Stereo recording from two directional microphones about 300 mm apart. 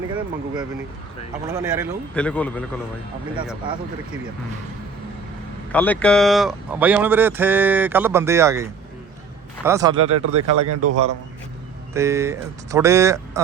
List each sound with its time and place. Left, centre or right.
0.1 s speech: centre
2.1 s a man's voice: centre
5.7 s speech: centre
10.1 s speech: right
11.9 s speech: centre